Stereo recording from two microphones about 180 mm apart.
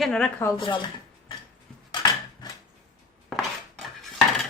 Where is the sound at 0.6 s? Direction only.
25° left (ahead or behind).